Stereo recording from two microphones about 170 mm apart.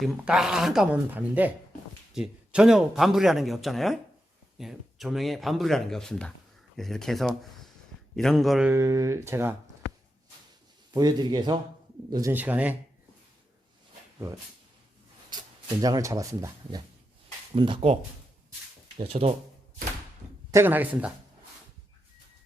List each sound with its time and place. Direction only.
0.0 s speech: centre (ahead or behind)
8.7 s speech: 20° right (ahead or behind)
10.9 s speech: 25° right (ahead or behind)
12.1 s speech: 15° right (ahead or behind)
15.8 s speech: 20° right (ahead or behind)
17.5 s speech: 30° right (ahead or behind)
18.9 s speech: 35° right (ahead or behind)
20.5 s speech: 15° right (ahead or behind)